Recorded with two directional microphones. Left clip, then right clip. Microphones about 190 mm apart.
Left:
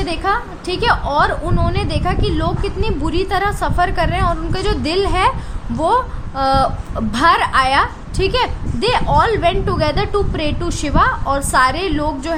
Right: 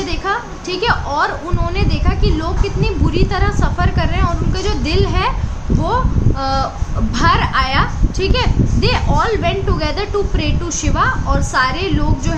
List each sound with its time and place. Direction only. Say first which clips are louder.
0.0 s a woman's voice: left 1 dB; 40° left (ahead or behind)
6.4 s a woman's voice: left 5 dB; 45° left (ahead or behind)